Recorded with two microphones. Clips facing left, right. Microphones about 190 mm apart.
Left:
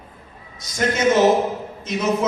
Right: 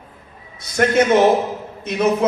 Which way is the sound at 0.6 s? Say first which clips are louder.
Right 6 dB; 60° right (ahead or behind).